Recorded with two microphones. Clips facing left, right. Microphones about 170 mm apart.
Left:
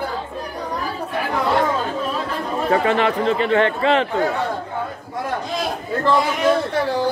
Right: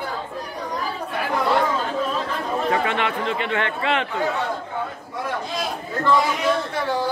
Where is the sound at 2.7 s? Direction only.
35° left (ahead or behind).